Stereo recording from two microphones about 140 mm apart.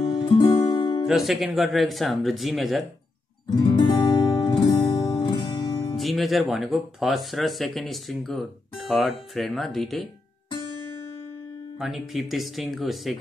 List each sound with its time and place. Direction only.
0.0 s music: 35° left (ahead or behind)
1.0 s speech: centre (ahead or behind)
3.6 s music: 30° left (ahead or behind)
5.9 s speech: centre (ahead or behind)
11.8 s speech: centre (ahead or behind)